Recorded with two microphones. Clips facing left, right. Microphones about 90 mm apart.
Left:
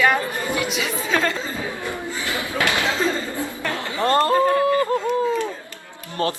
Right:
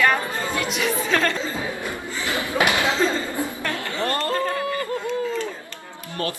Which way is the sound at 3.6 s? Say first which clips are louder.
Left 2 dB; 20° left (ahead or behind).